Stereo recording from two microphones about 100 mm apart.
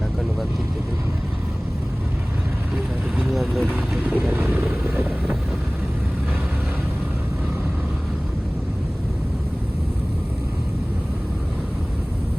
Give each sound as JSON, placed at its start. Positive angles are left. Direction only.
{"t": 3.2, "sound": "vehicle", "side_deg": -5}
{"t": 3.7, "sound": "vehicle", "side_deg": -15}